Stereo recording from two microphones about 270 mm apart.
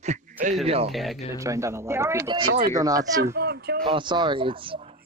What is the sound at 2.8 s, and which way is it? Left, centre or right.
Speech, centre.